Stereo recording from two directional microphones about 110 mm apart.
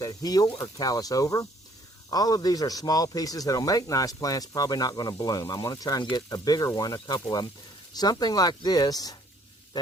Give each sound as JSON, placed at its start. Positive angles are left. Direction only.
{"t": 0.0, "sound": "a man's voice", "side_deg": 35}